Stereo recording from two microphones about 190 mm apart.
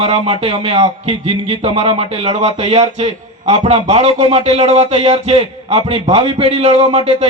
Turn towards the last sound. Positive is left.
turn(degrees=-30)  # may be behind; listen again after turning